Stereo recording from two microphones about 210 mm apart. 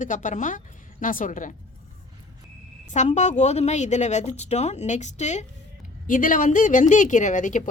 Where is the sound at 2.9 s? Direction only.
35° left (ahead or behind).